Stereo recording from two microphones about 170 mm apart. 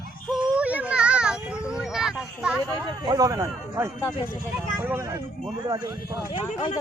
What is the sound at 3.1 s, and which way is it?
A man's voice, 20° right (ahead or behind).